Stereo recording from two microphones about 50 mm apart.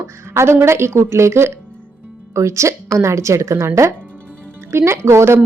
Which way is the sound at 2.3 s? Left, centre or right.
Right.